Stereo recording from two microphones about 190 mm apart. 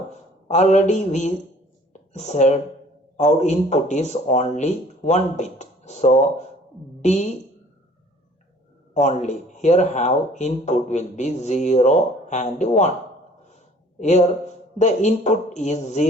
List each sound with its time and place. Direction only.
0.4 s speech: 40° left (ahead or behind)
8.9 s speech: 35° left (ahead or behind)
14.8 s speech: 40° left (ahead or behind)